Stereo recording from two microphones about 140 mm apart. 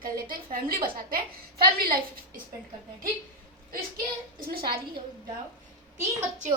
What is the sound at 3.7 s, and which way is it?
A woman's voice, 90° right.